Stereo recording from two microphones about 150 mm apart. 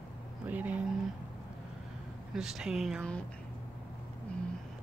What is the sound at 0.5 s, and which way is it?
Speech, 10° right (ahead or behind).